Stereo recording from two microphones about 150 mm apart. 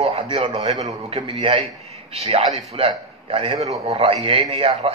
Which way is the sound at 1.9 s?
40° right (ahead or behind).